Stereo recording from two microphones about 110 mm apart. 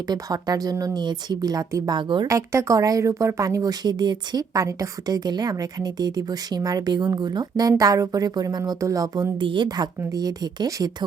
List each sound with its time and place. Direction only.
0.1 s speech: 35° right (ahead or behind)
2.2 s speech: 30° right (ahead or behind)
9.4 s speech: 45° right (ahead or behind)